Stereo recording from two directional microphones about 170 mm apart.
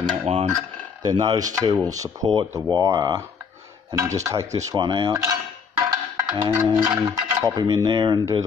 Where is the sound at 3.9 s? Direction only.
20° right (ahead or behind).